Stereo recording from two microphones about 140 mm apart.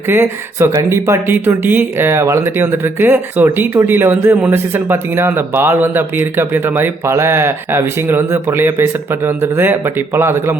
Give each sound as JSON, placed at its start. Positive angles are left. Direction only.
{"t": 0.1, "sound": "speech", "side_deg": -20}